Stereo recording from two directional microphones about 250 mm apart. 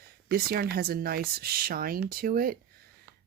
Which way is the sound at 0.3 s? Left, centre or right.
Right.